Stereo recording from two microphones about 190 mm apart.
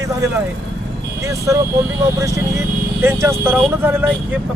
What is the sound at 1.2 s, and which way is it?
A man's voice, 15° right (ahead or behind).